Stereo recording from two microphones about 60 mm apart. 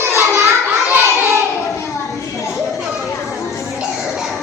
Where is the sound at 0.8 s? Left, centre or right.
Right.